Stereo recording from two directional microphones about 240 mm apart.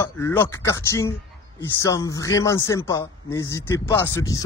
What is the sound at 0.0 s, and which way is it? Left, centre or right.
A man's voice, centre.